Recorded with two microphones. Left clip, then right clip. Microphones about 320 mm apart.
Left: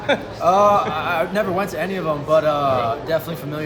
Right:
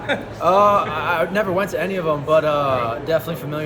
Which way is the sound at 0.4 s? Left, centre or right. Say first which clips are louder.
Even; centre.